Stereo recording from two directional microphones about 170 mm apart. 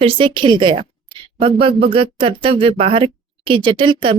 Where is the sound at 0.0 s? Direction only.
30° right (ahead or behind).